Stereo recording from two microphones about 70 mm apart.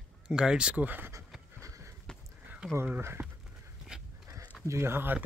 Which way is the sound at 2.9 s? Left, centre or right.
Right.